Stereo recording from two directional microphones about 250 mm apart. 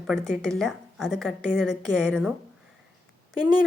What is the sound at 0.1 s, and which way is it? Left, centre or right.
Speech, centre.